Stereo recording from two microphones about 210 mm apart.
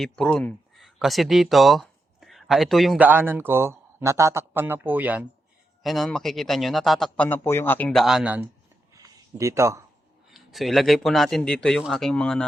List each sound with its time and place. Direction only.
0.0 s speech: 5° left (ahead or behind)
8.9 s a sound: 15° right (ahead or behind)
10.3 s speech: centre (ahead or behind)